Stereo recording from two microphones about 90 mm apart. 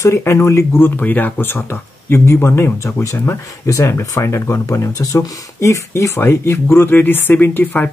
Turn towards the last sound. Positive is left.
turn(degrees=20)  # may be behind; listen again after turning